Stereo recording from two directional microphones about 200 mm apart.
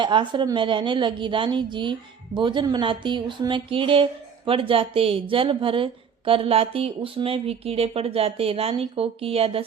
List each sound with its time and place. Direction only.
0.0 s speech: 25° right (ahead or behind)